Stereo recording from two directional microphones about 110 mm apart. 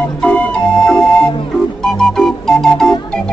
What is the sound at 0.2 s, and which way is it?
Music, 10° left (ahead or behind).